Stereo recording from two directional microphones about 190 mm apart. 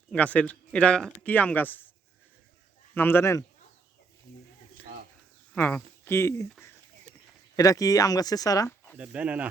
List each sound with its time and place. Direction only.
0.1 s speech: 5° left (ahead or behind)
2.9 s speech: 10° left (ahead or behind)
4.8 s bird: 10° left (ahead or behind)
5.5 s speech: 10° left (ahead or behind)
9.0 s speech: 5° right (ahead or behind)